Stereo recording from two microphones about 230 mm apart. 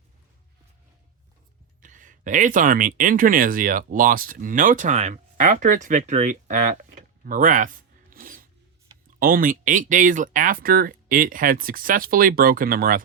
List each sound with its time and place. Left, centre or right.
1.8 s speech: right
8.1 s music: right
9.1 s speech: right